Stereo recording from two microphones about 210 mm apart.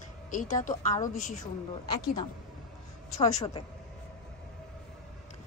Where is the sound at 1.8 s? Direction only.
20° left (ahead or behind).